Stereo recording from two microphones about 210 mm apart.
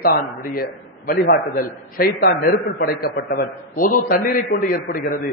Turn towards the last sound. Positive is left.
turn(degrees=40)  # may be behind; listen again after turning